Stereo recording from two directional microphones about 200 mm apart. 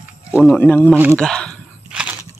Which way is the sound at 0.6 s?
10° left (ahead or behind).